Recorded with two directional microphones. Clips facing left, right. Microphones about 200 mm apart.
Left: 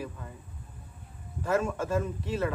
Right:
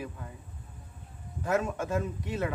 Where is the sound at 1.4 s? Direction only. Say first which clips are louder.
Left 1 dB; 15° right (ahead or behind).